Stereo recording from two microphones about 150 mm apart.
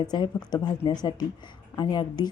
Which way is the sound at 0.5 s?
30° left (ahead or behind).